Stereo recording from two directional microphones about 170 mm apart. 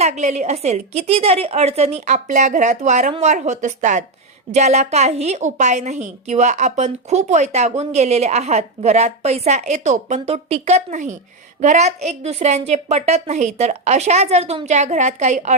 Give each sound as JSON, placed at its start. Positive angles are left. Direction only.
{"t": 0.0, "sound": "a woman's voice", "side_deg": -40}